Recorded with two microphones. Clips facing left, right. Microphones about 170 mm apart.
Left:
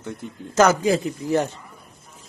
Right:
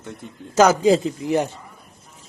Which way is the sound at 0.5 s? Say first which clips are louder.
Right 3 dB; 15° right (ahead or behind).